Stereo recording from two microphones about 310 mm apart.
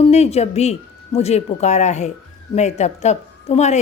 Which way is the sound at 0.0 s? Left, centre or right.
Centre.